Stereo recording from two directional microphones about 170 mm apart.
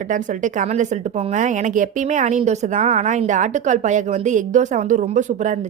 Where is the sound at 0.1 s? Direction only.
45° right (ahead or behind).